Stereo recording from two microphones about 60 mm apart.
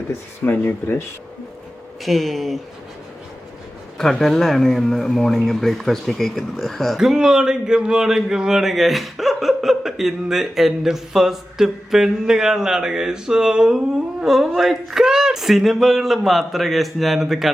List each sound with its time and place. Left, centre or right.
0.4 s speech: left
2.0 s speech: centre
3.9 s speech: centre
7.0 s speech: centre